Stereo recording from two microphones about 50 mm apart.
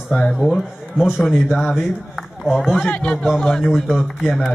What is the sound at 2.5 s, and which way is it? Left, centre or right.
Speech, centre.